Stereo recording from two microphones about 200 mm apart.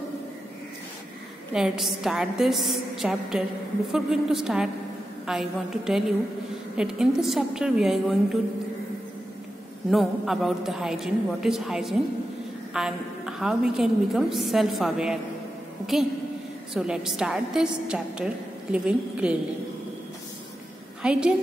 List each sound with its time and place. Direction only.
1.5 s a woman's voice: centre (ahead or behind)
9.8 s a woman's voice: centre (ahead or behind)
16.7 s a woman's voice: 5° right (ahead or behind)
21.0 s a woman's voice: 5° right (ahead or behind)